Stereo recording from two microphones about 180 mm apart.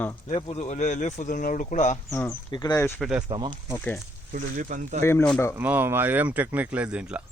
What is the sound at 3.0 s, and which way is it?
Speech, 5° right (ahead or behind).